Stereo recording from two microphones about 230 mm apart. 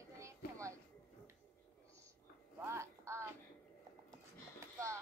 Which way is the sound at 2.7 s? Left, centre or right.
Centre.